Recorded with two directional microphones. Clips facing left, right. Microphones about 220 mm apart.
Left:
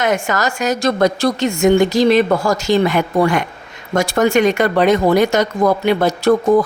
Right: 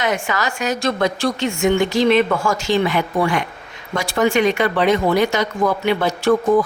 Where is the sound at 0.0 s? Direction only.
45° left (ahead or behind).